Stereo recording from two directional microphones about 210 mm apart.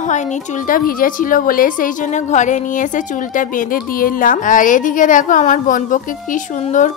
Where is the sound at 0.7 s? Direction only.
40° left (ahead or behind).